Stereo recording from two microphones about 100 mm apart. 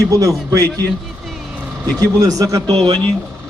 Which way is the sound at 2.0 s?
35° right (ahead or behind).